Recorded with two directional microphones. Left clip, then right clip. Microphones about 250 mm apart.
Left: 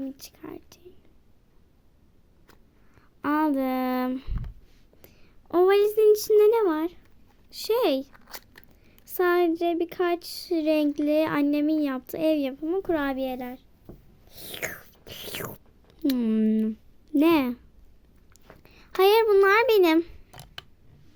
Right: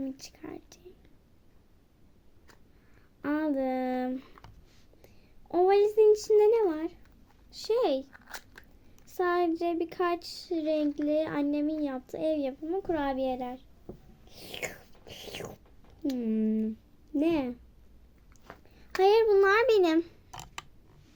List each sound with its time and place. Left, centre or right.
0.0 s speech: centre
3.2 s speech: left
8.1 s a sound: centre
9.1 s speech: left
14.3 s whispering: left
18.6 s a child's voice: left